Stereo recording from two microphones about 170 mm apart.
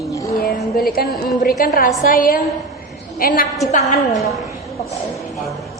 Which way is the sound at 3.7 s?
45° left (ahead or behind).